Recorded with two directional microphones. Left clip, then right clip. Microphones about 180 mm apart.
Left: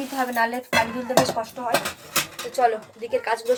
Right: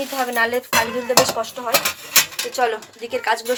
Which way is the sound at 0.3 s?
5° right (ahead or behind).